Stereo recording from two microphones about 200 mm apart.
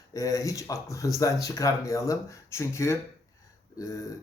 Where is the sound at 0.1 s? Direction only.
15° left (ahead or behind).